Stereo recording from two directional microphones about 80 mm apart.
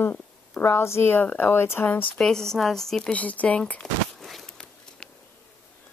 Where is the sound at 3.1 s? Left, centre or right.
Centre.